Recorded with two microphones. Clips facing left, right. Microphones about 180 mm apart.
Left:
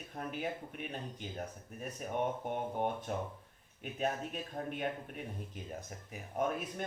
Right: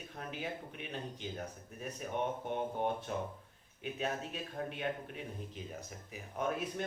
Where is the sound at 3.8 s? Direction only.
50° left (ahead or behind).